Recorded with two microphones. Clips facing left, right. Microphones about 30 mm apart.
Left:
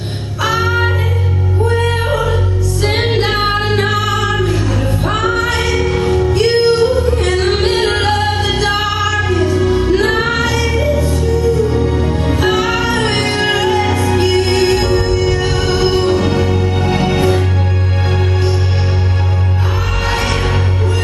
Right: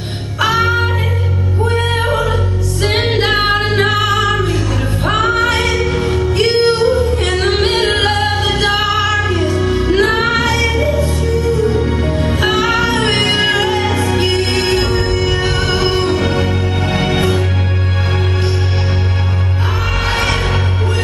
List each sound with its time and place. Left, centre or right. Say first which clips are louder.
0.4 s music: right 2 dB; right
1.7 s music: even; centre
3.2 s music: right 1 dB; centre
3.9 s music: right 2 dB; right
5.9 s music: left 2 dB; centre
6.3 s music: even; right
8.5 s music: right 1 dB; right
9.6 s music: right 1 dB; centre
14.9 s music: left 2 dB; right
15.5 s music: left 1 dB; right
20.1 s music: right 1 dB; centre